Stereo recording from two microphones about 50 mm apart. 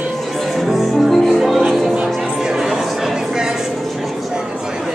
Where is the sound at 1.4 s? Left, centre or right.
Centre.